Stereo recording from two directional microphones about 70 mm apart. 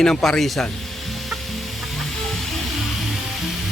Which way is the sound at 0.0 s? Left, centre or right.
Centre.